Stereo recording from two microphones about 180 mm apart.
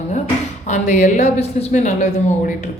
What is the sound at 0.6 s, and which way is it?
A woman's voice, 45° left (ahead or behind).